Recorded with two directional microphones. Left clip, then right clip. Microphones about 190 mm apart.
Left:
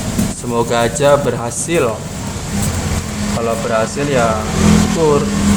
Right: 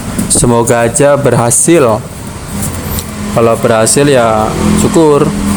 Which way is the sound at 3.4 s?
50° right (ahead or behind).